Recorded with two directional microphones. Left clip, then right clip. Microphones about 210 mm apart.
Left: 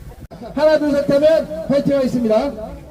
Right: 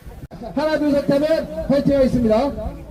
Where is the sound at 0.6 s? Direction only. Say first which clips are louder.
Left 5 dB; 15° right (ahead or behind).